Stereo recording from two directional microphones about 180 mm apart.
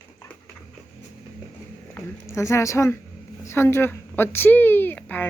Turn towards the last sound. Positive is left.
turn(degrees=10)  # may be behind; listen again after turning